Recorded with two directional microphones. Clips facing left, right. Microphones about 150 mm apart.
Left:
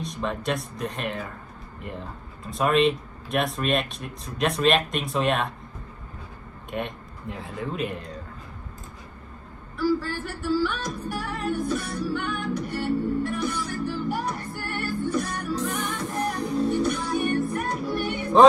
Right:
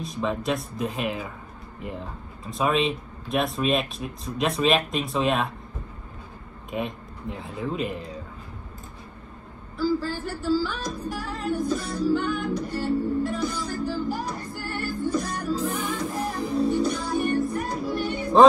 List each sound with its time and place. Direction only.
0.0 s speech: centre (ahead or behind)
6.7 s speech: centre (ahead or behind)
9.8 s music: 60° left (ahead or behind)
15.5 s music: centre (ahead or behind)
16.8 s music: 60° left (ahead or behind)
18.3 s speech: centre (ahead or behind)